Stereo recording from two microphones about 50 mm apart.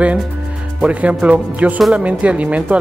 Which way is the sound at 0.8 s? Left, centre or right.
Right.